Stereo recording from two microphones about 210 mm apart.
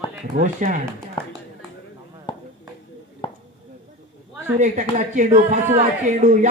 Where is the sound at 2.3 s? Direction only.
20° left (ahead or behind).